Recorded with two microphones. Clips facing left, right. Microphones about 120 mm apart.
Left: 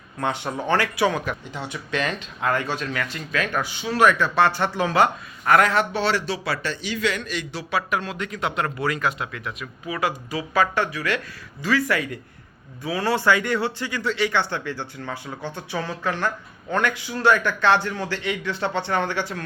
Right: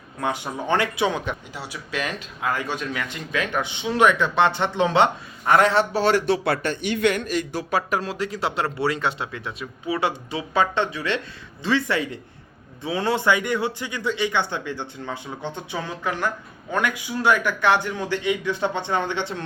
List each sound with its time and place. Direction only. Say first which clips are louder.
0.2 s speech: left 1 dB; 10° right (ahead or behind)
1.5 s speech: left 2 dB; 5° right (ahead or behind); by 6.0 s 30° right (ahead or behind)
6.0 s a man's voice: right 4 dB; 50° right (ahead or behind); by 19.5 s 25° right (ahead or behind)